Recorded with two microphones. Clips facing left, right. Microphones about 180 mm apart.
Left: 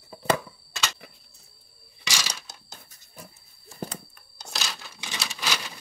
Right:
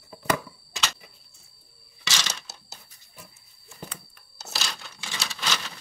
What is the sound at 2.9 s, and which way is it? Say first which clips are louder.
Pig: left 4 dB; 40° left (ahead or behind).